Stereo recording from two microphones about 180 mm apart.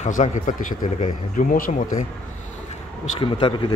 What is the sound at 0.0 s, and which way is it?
Speech, 40° left (ahead or behind).